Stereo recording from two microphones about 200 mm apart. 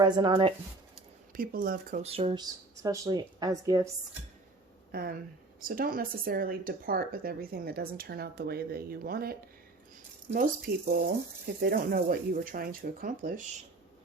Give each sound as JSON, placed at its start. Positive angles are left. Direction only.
{"t": 0.0, "sound": "speech", "side_deg": -20}
{"t": 1.3, "sound": "speech", "side_deg": -45}
{"t": 4.9, "sound": "speech", "side_deg": -50}
{"t": 10.9, "sound": "speech", "side_deg": -50}